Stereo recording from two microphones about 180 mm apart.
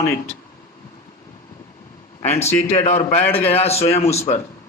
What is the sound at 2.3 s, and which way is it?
A man's voice, 35° left (ahead or behind).